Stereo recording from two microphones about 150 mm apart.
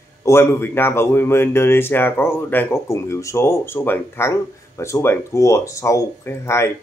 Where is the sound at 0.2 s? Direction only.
15° left (ahead or behind).